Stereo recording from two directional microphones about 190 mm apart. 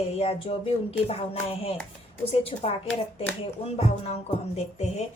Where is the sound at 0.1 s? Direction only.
35° left (ahead or behind).